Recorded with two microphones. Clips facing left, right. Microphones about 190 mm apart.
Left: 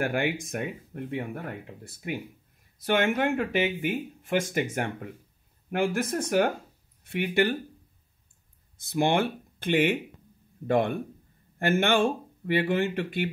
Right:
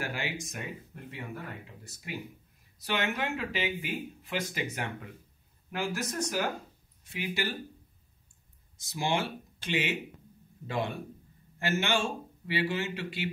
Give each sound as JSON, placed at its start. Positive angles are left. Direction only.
{"t": 0.0, "sound": "speech", "side_deg": 55}
{"t": 2.8, "sound": "speech", "side_deg": 50}
{"t": 8.7, "sound": "speech", "side_deg": 55}